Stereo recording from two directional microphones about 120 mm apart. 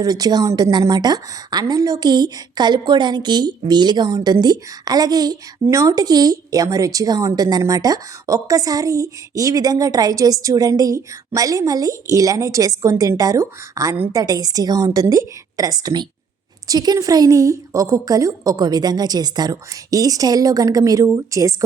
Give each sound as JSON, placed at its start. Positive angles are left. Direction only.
{"t": 0.0, "sound": "a woman's voice", "side_deg": -30}